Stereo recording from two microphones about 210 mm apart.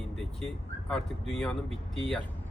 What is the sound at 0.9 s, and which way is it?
A man's voice, centre (ahead or behind).